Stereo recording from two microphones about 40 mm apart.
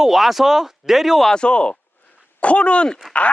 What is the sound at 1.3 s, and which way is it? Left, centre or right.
Speech, left.